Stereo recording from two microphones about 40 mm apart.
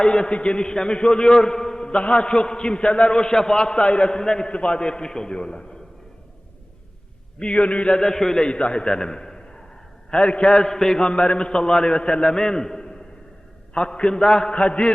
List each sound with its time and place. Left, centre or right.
0.0 s a man's voice: left
7.3 s a man's voice: left
8.0 s a man's voice: centre
10.1 s a man's voice: left
10.7 s a man's voice: centre
11.0 s a man's voice: left
13.7 s a man's voice: left
14.5 s a man's voice: left